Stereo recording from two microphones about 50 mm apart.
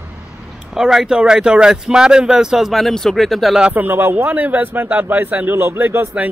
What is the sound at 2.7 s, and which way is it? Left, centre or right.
Speech, centre.